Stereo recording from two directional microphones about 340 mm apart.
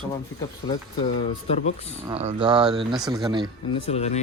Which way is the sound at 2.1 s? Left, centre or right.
Centre.